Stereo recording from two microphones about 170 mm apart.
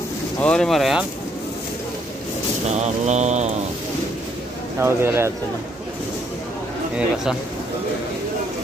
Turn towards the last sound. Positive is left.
turn(degrees=-5)  # may be behind; listen again after turning